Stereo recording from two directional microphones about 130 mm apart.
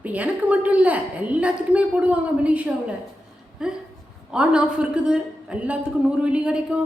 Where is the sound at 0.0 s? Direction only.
10° right (ahead or behind).